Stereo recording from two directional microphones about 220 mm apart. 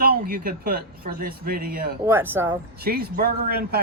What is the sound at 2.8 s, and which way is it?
A man's voice, 45° right (ahead or behind).